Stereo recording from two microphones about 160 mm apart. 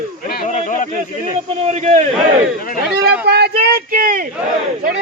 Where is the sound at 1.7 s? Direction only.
45° right (ahead or behind).